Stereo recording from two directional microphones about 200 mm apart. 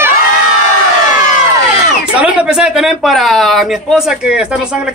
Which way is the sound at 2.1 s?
5° right (ahead or behind).